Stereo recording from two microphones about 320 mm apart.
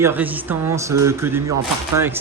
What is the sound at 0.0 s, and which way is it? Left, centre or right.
Speech, centre.